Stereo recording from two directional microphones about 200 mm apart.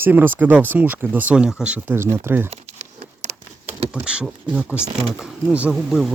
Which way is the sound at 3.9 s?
5° right (ahead or behind).